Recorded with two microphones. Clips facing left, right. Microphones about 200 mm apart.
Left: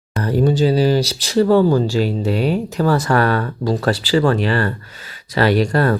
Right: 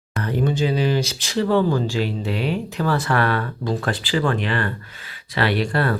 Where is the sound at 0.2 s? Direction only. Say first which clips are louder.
Left 5 dB; 40° left (ahead or behind).